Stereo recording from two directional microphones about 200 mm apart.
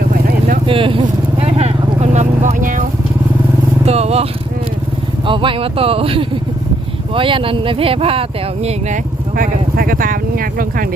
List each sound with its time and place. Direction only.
0.1 s vehicle: 45° right (ahead or behind)
0.6 s vehicle: 25° right (ahead or behind)
3.8 s speech: 30° right (ahead or behind)
9.3 s speech: 45° right (ahead or behind)